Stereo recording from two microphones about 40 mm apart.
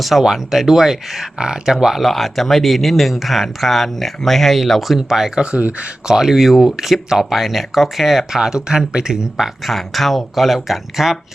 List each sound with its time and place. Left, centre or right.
0.0 s speech: centre
5.4 s speech: right
6.1 s speech: centre
9.4 s speech: centre